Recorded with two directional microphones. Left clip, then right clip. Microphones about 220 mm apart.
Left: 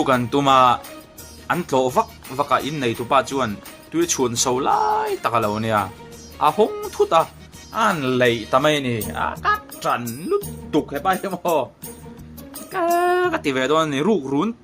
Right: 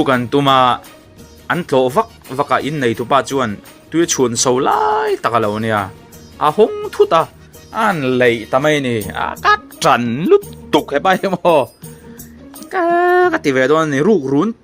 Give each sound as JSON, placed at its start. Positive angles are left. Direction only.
{"t": 0.0, "sound": "speech", "side_deg": -15}
{"t": 8.7, "sound": "speech", "side_deg": -30}
{"t": 12.7, "sound": "speech", "side_deg": -25}